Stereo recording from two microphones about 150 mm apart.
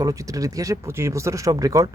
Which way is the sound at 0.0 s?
20° right (ahead or behind).